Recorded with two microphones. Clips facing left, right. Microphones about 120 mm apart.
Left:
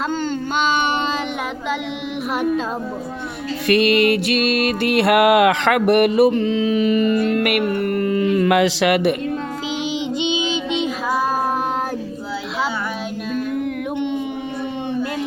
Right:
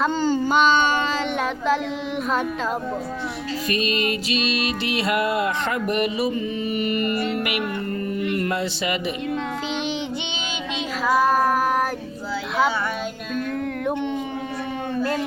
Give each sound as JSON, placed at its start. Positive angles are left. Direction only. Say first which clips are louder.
{"t": 0.0, "sound": "a sound", "louder": "right 2 dB", "side_deg": -5}
{"t": 0.7, "sound": "child singing", "louder": "even", "side_deg": 15}
{"t": 3.7, "sound": "music", "louder": "left 10 dB", "side_deg": 70}
{"t": 7.3, "sound": "speech", "louder": "left 7 dB", "side_deg": 65}
{"t": 9.8, "sound": "child singing", "louder": "left 5 dB", "side_deg": 15}
{"t": 13.3, "sound": "music", "louder": "left 3 dB", "side_deg": 10}